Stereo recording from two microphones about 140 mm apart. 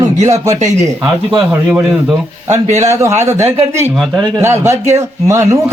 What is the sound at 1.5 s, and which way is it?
Speech, 15° right (ahead or behind).